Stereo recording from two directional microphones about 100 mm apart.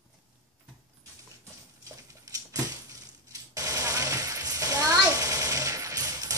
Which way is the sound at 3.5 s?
35° right (ahead or behind).